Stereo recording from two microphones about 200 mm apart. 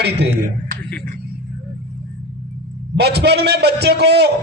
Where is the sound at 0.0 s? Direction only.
55° right (ahead or behind).